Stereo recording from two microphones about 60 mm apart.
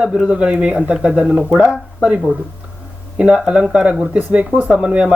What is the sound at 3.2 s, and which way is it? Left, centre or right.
Speech, centre.